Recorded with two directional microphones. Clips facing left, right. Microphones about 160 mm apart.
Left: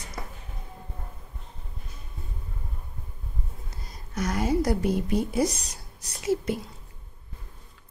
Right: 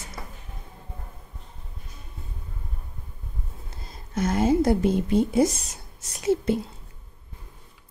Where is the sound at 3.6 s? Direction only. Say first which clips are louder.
Right 1 dB; 25° right (ahead or behind).